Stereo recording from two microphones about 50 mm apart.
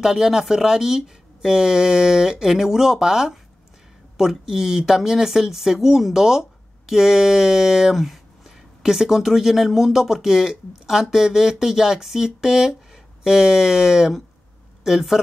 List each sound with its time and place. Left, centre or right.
0.0 s speech: centre